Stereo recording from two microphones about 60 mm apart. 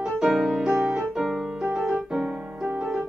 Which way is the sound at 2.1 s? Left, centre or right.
Centre.